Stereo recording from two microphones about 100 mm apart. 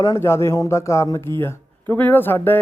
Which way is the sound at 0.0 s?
30° left (ahead or behind).